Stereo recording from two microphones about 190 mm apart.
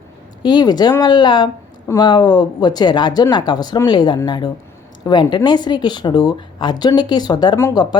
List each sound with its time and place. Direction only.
0.4 s speech: 20° left (ahead or behind)